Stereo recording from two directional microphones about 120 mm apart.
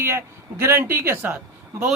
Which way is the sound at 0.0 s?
20° right (ahead or behind).